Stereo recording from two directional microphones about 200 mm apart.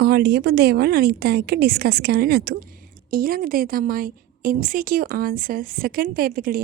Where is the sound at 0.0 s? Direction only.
50° right (ahead or behind).